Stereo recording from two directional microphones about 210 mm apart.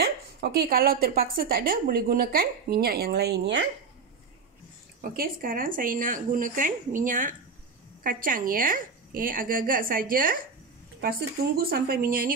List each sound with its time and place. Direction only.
0.0 s a woman's voice: 50° right (ahead or behind)
5.1 s a woman's voice: 45° right (ahead or behind)